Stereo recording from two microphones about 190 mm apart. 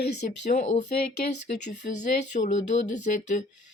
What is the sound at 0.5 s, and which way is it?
Speech, 40° left (ahead or behind).